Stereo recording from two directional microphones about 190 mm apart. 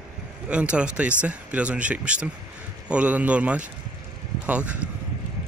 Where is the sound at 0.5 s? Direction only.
5° right (ahead or behind).